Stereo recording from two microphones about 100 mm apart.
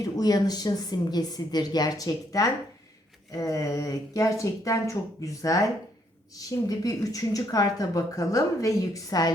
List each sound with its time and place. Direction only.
0.0 s a woman's voice: 40° left (ahead or behind)